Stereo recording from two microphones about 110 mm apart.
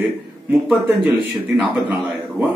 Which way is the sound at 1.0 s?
10° right (ahead or behind).